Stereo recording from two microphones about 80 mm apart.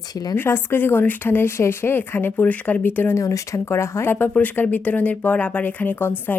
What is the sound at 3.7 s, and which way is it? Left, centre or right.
Speech, left.